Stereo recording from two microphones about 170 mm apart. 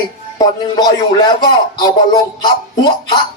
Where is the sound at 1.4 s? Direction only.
25° left (ahead or behind).